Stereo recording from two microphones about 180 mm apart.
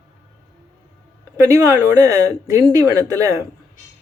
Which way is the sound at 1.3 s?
15° right (ahead or behind).